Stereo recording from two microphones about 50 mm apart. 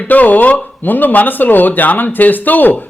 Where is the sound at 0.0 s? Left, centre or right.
Left.